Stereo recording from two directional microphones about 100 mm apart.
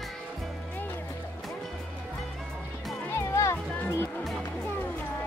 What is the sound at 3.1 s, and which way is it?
Music, 30° left (ahead or behind).